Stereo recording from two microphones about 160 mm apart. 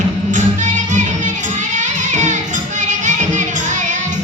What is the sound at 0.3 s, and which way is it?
Music, 50° right (ahead or behind).